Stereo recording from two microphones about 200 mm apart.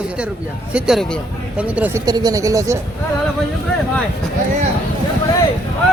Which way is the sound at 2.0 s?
20° right (ahead or behind).